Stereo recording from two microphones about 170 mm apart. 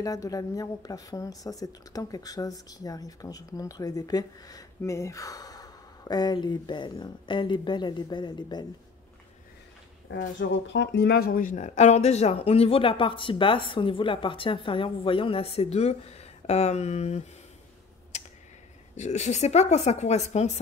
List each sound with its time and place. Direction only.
0.0 s speech: 20° left (ahead or behind)
10.4 s speech: 90° left; by 17.2 s 40° left (ahead or behind)
18.9 s speech: 45° left (ahead or behind)